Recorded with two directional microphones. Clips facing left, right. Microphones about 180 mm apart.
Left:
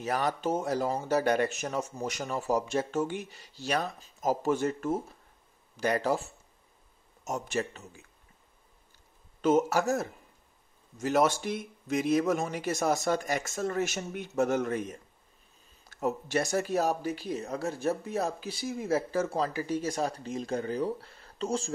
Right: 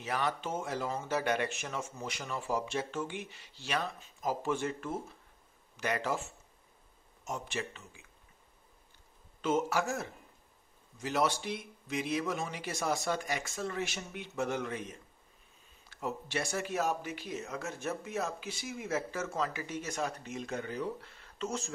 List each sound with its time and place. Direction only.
0.0 s speech: 40° left (ahead or behind)
7.2 s speech: 45° left (ahead or behind)
9.4 s speech: 40° left (ahead or behind)